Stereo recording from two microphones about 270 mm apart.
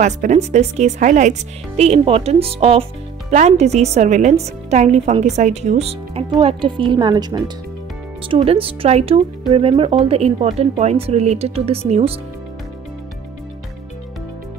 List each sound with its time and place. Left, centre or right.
0.0 s speech: right